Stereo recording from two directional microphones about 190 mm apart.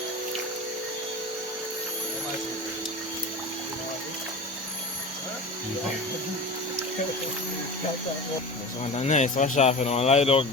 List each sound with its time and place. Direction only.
8.8 s speech: 35° left (ahead or behind)